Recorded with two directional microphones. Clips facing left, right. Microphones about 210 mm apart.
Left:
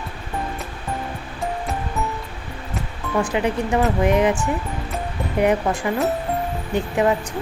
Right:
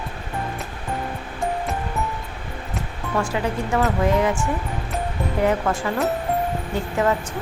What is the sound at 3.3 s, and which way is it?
Speech, 15° left (ahead or behind).